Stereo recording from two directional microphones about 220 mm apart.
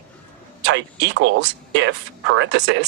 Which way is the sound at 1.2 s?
55° right (ahead or behind).